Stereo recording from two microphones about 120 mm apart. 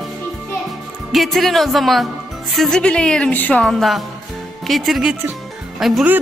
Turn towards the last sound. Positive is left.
turn(degrees=0)  # may be behind; listen again after turning